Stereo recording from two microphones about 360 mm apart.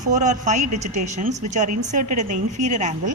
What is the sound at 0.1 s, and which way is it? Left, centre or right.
A woman's voice, centre.